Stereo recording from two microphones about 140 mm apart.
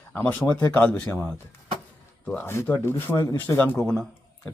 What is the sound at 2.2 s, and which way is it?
Speech, 10° left (ahead or behind).